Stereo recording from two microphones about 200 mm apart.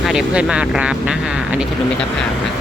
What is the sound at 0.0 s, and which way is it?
Speech, centre (ahead or behind).